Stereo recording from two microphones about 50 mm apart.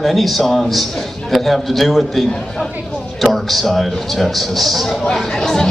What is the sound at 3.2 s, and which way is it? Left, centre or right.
A man's voice, centre.